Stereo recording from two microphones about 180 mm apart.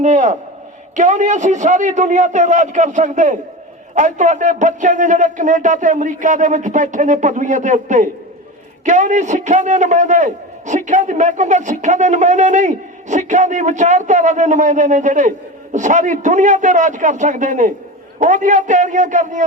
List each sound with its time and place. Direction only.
0.0 s a man's voice: 40° right (ahead or behind)